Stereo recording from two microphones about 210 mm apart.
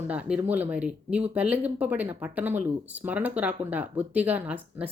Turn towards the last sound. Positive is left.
turn(degrees=-5)  # may be behind; listen again after turning